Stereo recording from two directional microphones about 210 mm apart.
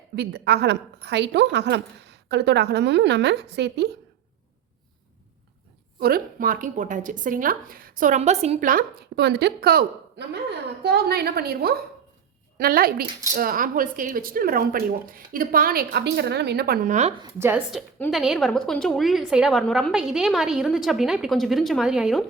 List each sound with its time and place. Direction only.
0.2 s speech: 50° right (ahead or behind)
6.0 s a woman's voice: 45° right (ahead or behind); by 17.2 s 30° right (ahead or behind)
17.2 s a woman's voice: 10° right (ahead or behind)
17.7 s a woman's voice: centre (ahead or behind)